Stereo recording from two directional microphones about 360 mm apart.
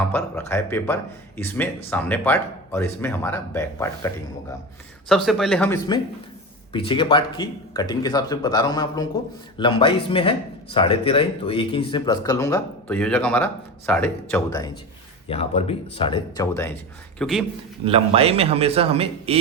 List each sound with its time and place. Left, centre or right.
0.1 s speech: centre
17.8 s a man's voice: centre